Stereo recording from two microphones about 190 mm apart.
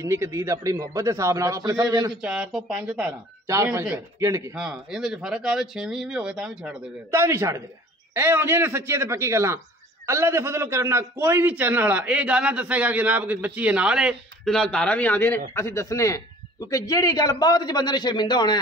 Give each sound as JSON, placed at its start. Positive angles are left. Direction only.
{"t": 0.0, "sound": "a man's voice", "side_deg": -15}
{"t": 2.2, "sound": "a man's voice", "side_deg": -5}
{"t": 4.6, "sound": "a man's voice", "side_deg": -5}